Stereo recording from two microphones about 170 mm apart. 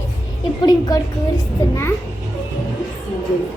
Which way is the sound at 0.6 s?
20° left (ahead or behind).